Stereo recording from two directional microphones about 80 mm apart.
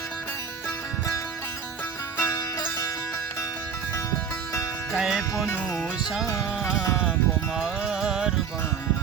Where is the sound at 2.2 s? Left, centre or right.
Left.